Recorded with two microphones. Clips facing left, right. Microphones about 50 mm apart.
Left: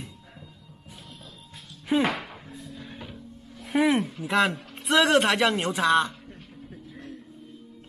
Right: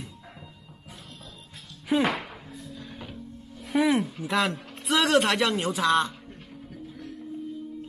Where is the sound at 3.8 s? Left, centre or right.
Centre.